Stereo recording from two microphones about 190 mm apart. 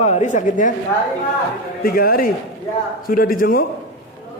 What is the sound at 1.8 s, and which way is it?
A man's voice, 50° left (ahead or behind).